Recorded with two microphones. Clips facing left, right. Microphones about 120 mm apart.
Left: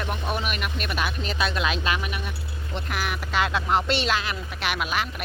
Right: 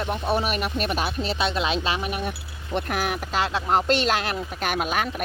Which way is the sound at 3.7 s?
45° right (ahead or behind).